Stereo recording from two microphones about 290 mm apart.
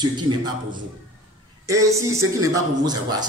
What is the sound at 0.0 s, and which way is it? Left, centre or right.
Speech, centre.